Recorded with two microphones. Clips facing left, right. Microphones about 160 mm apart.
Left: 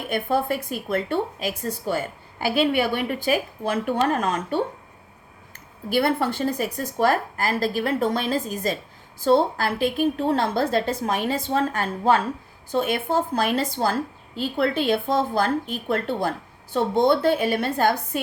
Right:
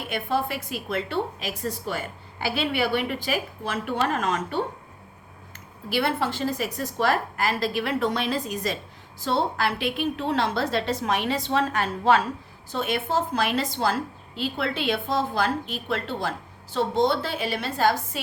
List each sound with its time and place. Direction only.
0.1 s a woman's voice: 50° left (ahead or behind)
5.9 s a woman's voice: 50° left (ahead or behind)